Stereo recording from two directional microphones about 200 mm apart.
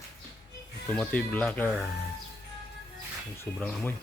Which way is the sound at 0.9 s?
5° left (ahead or behind).